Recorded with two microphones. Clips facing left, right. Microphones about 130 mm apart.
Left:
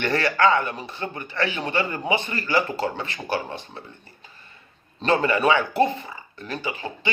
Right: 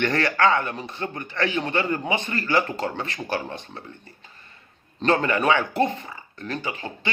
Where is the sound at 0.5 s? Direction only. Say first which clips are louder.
Left 1 dB; 20° left (ahead or behind).